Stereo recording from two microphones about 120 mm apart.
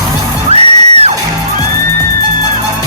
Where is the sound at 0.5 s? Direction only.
60° right (ahead or behind).